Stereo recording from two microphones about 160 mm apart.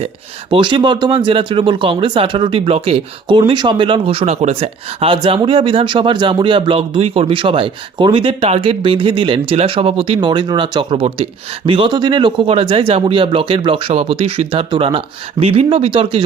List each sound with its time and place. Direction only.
0.5 s speech: 30° right (ahead or behind)